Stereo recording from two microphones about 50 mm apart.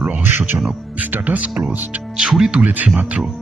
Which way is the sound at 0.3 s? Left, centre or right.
Right.